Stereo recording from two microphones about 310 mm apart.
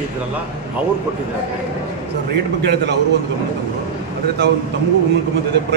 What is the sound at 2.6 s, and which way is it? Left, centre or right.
Speech, right.